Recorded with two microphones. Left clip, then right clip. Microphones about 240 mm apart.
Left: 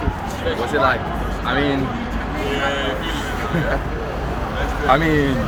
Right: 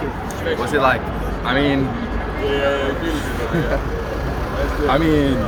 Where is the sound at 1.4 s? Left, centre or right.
Right.